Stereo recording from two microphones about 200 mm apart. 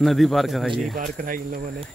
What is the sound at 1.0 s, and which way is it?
Speech, 45° right (ahead or behind).